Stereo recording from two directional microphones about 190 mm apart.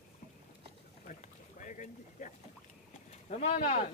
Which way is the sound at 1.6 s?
40° left (ahead or behind).